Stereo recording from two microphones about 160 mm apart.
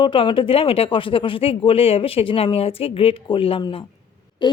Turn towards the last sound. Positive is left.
turn(degrees=25)  # may be behind; listen again after turning